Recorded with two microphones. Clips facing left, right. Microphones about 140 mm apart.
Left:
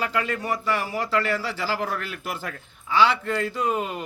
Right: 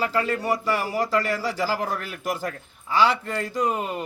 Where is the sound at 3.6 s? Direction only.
Centre (ahead or behind).